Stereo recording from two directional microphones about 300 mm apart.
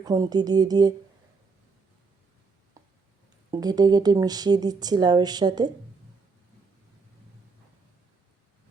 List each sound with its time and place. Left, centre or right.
0.0 s speech: centre
3.5 s speech: centre